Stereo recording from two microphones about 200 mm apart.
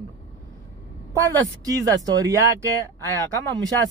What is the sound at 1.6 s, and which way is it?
Speech, 15° right (ahead or behind).